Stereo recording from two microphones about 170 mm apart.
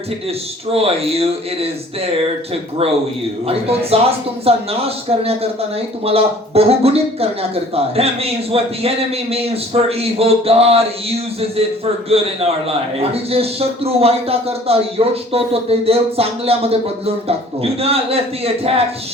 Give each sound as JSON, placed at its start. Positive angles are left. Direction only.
{"t": 0.7, "sound": "speech", "side_deg": -35}
{"t": 3.4, "sound": "speech", "side_deg": -35}
{"t": 12.0, "sound": "speech", "side_deg": -35}